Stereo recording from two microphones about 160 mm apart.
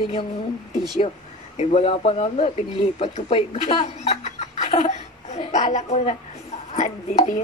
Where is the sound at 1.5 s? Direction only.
40° left (ahead or behind).